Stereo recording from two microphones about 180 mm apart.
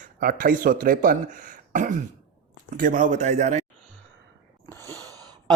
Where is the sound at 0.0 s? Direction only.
50° right (ahead or behind).